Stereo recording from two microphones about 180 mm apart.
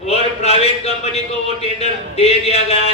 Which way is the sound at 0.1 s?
35° left (ahead or behind).